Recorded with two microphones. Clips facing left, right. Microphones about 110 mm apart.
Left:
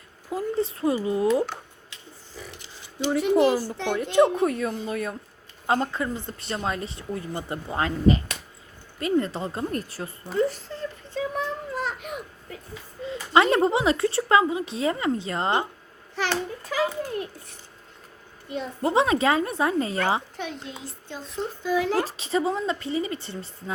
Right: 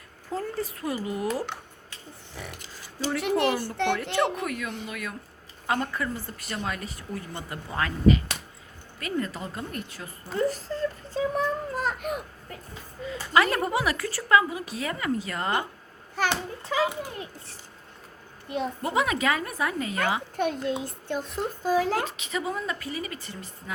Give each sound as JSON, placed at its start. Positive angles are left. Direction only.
{"t": 0.3, "sound": "speech", "side_deg": 10}
{"t": 0.6, "sound": "a woman's voice", "side_deg": 25}
{"t": 2.3, "sound": "a sound", "side_deg": -65}
{"t": 3.2, "sound": "speech", "side_deg": -65}
{"t": 3.9, "sound": "speech", "side_deg": 15}
{"t": 4.4, "sound": "a woman's voice", "side_deg": 30}
{"t": 10.3, "sound": "child singing", "side_deg": -40}
{"t": 13.3, "sound": "a woman's voice", "side_deg": 25}
{"t": 16.3, "sound": "a child's voice", "side_deg": -20}
{"t": 18.4, "sound": "a child's voice", "side_deg": -50}
{"t": 18.8, "sound": "a woman's voice", "side_deg": 30}
{"t": 20.3, "sound": "a child's voice", "side_deg": -50}
{"t": 21.7, "sound": "speech", "side_deg": -40}
{"t": 21.9, "sound": "a woman's voice", "side_deg": 35}